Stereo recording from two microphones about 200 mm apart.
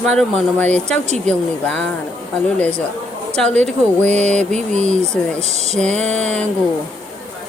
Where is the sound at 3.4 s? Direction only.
5° left (ahead or behind).